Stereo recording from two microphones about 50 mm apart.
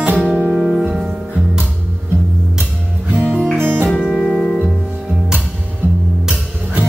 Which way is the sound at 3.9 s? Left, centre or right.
Centre.